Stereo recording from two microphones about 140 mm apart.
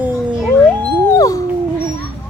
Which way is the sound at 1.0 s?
25° left (ahead or behind).